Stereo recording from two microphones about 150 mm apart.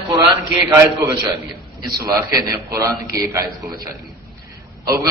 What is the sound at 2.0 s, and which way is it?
Speech, 25° right (ahead or behind).